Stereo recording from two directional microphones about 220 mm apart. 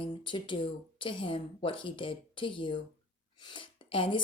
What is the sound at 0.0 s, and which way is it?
Speech, 20° left (ahead or behind).